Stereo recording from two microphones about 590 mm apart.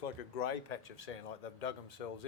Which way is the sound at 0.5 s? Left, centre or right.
Left.